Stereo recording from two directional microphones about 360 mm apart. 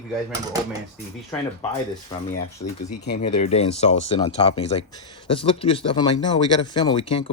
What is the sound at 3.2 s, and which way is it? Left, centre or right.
Speech, centre.